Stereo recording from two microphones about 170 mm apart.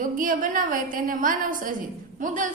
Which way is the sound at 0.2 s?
55° right (ahead or behind).